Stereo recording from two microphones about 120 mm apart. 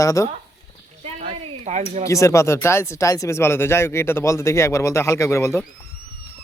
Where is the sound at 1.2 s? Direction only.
75° right (ahead or behind).